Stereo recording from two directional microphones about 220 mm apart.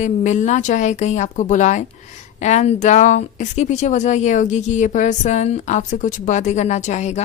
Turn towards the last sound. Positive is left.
turn(degrees=30)  # may be behind; listen again after turning